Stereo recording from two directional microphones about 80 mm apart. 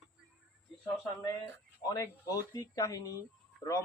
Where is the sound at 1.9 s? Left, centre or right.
Left.